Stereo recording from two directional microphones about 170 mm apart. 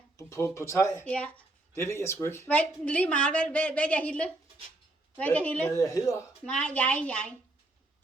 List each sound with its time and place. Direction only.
0.2 s speech: 15° left (ahead or behind)
5.7 s speech: 20° left (ahead or behind)
6.4 s speech: 5° left (ahead or behind)